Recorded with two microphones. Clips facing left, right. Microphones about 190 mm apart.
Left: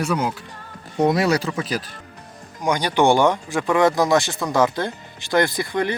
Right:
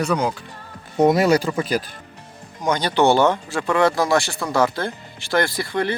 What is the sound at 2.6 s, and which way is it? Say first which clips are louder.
Speech: even; 10° left (ahead or behind).